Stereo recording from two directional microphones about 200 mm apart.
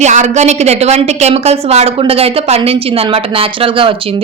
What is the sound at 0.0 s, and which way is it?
A woman's voice, 35° right (ahead or behind).